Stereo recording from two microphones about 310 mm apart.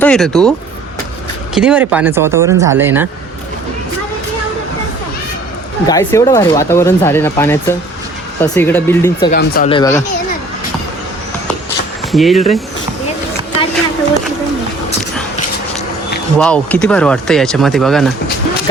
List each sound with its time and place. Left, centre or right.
0.0 s speech: centre
1.5 s speech: centre
5.9 s speech: centre
9.3 s speech: left
9.6 s speech: centre
12.1 s speech: centre
16.4 s speech: centre